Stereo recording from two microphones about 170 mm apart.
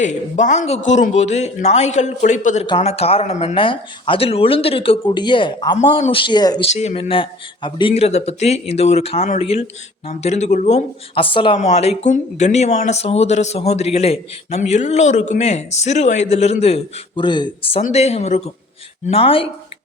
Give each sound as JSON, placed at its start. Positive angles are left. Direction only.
{"t": 0.0, "sound": "a man's voice", "side_deg": 45}
{"t": 2.6, "sound": "speech", "side_deg": 35}
{"t": 6.7, "sound": "speech", "side_deg": 40}